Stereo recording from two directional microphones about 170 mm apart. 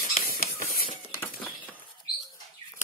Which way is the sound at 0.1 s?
60° left (ahead or behind).